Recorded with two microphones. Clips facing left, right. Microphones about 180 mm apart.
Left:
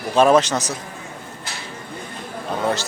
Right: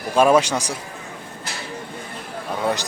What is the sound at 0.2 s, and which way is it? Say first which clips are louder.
Speech: left 1 dB; 10° right (ahead or behind).